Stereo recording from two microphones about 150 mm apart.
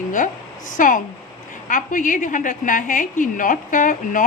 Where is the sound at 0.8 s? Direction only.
60° left (ahead or behind).